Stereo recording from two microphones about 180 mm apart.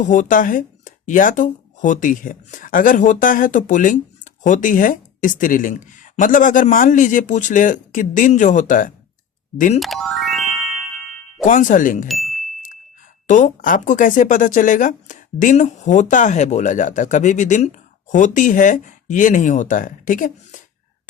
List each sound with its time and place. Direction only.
0.0 s speech: 45° left (ahead or behind)
9.8 s music: centre (ahead or behind)
11.4 s speech: 45° left (ahead or behind)
12.0 s ding: centre (ahead or behind)
13.2 s speech: 45° left (ahead or behind)